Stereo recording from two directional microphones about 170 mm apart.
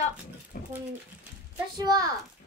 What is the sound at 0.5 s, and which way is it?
Speech, 55° left (ahead or behind).